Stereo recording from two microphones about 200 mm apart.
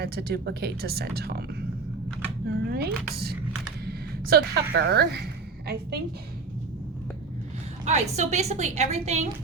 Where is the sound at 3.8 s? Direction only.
50° right (ahead or behind).